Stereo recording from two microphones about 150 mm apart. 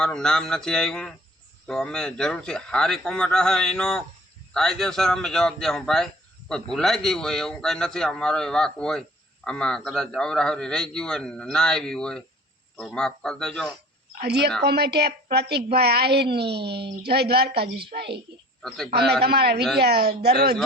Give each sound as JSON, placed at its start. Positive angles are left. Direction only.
{"t": 0.0, "sound": "a man's voice", "side_deg": 5}
{"t": 14.2, "sound": "a woman's voice", "side_deg": -90}